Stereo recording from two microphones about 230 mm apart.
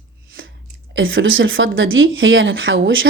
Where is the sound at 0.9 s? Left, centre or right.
Right.